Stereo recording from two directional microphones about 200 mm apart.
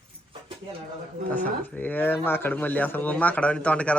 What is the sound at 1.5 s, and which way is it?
Speech, 10° left (ahead or behind).